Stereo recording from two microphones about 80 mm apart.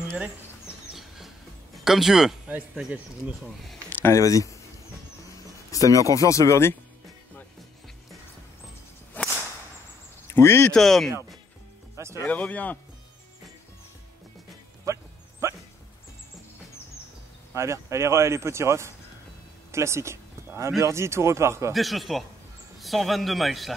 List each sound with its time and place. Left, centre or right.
0.9 s train: centre
1.9 s a man's voice: centre
3.9 s a sound: left
4.2 s speech: left
5.7 s speech: left
9.1 s whip: left
10.2 s speech: left
10.7 s a man's voice: centre
12.3 s speech: centre
15.4 s dog: right
17.6 s speech: right
21.7 s a man's voice: centre